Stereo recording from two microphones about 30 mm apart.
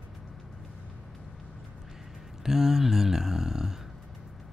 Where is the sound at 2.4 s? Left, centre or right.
Centre.